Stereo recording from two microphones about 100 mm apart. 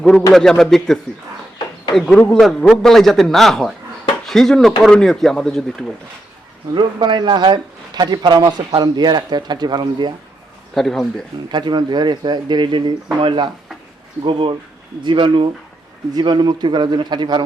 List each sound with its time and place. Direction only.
0.0 s a man's voice: 5° left (ahead or behind)
2.0 s a man's voice: 5° left (ahead or behind)
6.7 s speech: 50° right (ahead or behind)
10.8 s a man's voice: centre (ahead or behind)
11.5 s speech: 50° right (ahead or behind)